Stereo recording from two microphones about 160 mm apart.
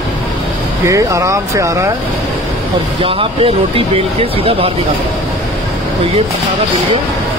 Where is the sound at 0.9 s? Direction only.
20° right (ahead or behind).